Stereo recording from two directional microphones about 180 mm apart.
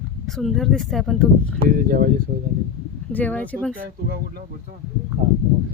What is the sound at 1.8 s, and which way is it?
Speech, 55° right (ahead or behind).